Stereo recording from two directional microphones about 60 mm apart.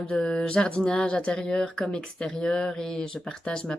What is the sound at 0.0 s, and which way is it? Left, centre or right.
Speech, centre.